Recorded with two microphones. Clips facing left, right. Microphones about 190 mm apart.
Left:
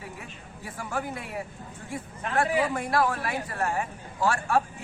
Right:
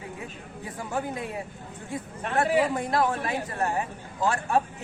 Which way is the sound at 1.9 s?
20° right (ahead or behind).